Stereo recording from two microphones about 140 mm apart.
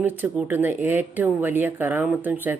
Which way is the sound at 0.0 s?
10° right (ahead or behind).